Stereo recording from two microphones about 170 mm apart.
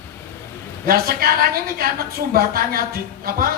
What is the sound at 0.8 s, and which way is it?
Speech, 60° right (ahead or behind).